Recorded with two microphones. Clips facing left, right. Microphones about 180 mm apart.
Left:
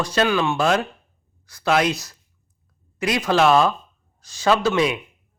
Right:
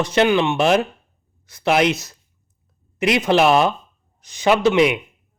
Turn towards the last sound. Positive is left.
turn(degrees=-20)  # may be behind; listen again after turning